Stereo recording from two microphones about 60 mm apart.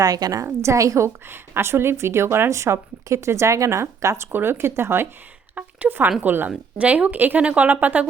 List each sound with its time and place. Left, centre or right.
0.0 s a woman's voice: right
0.4 s a woman's voice: right
4.3 s a woman's voice: right
5.5 s a woman's voice: right
6.7 s a woman's voice: right